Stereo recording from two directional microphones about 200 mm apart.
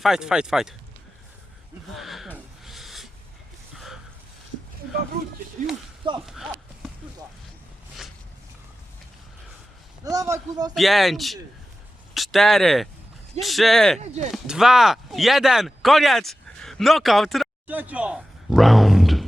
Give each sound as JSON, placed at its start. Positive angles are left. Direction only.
{"t": 0.0, "sound": "speech", "side_deg": -5}
{"t": 2.0, "sound": "a sound", "side_deg": 0}
{"t": 6.0, "sound": "speech", "side_deg": -25}
{"t": 10.0, "sound": "a man's voice", "side_deg": -15}
{"t": 10.8, "sound": "speech", "side_deg": 0}
{"t": 14.0, "sound": "speech", "side_deg": -35}
{"t": 14.3, "sound": "speech", "side_deg": 0}